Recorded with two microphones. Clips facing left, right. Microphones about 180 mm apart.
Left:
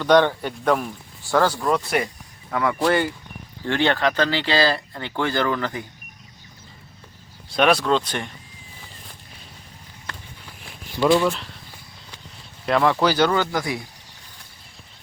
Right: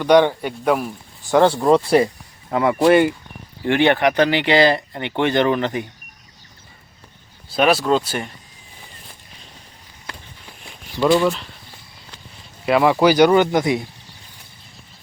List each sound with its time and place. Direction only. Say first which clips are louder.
0.0 s speech: right 3 dB; 15° right (ahead or behind)
1.3 s speech: right 6 dB; 25° right (ahead or behind)
7.5 s speech: right 2 dB; 5° right (ahead or behind)
10.1 s walk: right 1 dB; 15° right (ahead or behind)
11.0 s speech: right 2 dB; centre (ahead or behind)
12.6 s speech: right 4 dB; 10° right (ahead or behind)